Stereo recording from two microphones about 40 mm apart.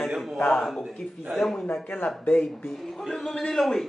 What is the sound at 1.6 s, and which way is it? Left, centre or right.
Speech, left.